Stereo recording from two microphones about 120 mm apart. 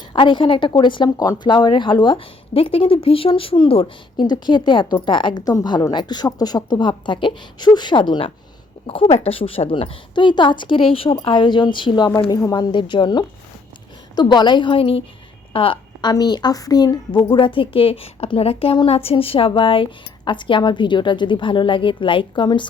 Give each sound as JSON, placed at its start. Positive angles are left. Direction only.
{"t": 0.1, "sound": "a woman's voice", "side_deg": 40}
{"t": 4.2, "sound": "a woman's voice", "side_deg": 35}
{"t": 12.7, "sound": "a woman's voice", "side_deg": 40}